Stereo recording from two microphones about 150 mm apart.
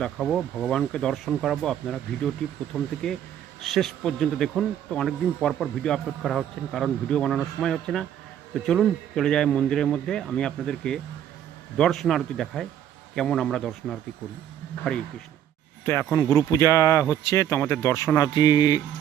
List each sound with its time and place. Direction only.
0.0 s speech: 5° left (ahead or behind)
15.8 s speech: 15° left (ahead or behind)